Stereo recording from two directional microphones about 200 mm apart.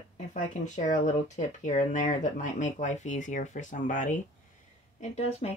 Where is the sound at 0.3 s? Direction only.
35° left (ahead or behind).